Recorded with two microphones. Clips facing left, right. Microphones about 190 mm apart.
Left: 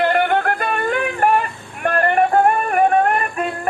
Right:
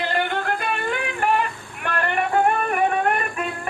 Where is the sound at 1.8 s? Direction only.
50° left (ahead or behind).